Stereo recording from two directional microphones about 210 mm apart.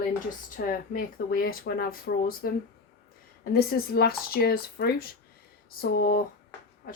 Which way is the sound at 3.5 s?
45° left (ahead or behind).